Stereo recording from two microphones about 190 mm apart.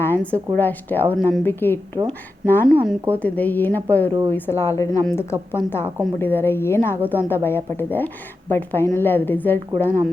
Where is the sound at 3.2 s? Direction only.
10° left (ahead or behind).